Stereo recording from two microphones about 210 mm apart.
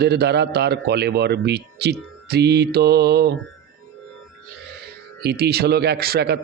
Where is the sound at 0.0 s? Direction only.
50° right (ahead or behind).